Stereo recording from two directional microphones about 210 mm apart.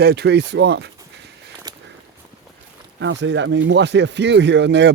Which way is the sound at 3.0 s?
60° right (ahead or behind).